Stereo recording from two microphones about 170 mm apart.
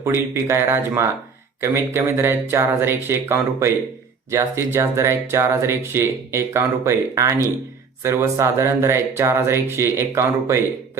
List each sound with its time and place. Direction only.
0.0 s speech: 15° right (ahead or behind)